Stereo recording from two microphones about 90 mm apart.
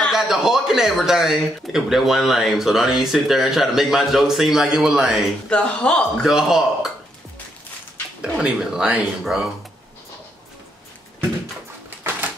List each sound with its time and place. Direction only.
0.1 s speech: 5° right (ahead or behind)
5.5 s speech: 10° left (ahead or behind)
6.2 s speech: 5° right (ahead or behind)
8.2 s speech: 10° right (ahead or behind)
12.0 s typewriter: 20° right (ahead or behind)